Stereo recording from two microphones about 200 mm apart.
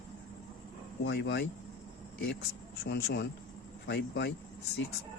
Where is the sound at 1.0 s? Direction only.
60° left (ahead or behind).